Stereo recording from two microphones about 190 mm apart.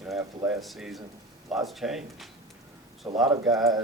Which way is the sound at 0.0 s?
5° right (ahead or behind).